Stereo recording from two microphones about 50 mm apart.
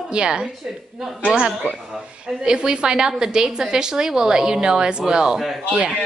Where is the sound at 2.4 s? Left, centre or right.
Centre.